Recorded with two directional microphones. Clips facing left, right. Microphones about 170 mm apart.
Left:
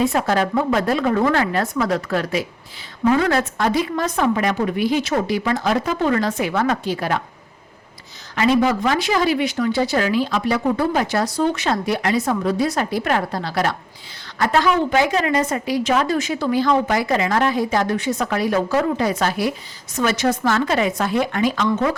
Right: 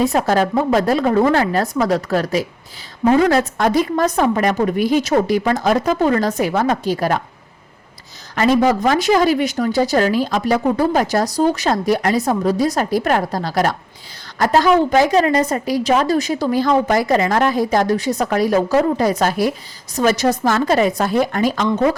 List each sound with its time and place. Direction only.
0.0 s a woman's voice: 40° right (ahead or behind)
8.4 s a woman's voice: 40° right (ahead or behind)